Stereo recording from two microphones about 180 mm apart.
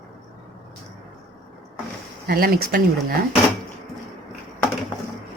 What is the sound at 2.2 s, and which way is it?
Speech, 55° right (ahead or behind).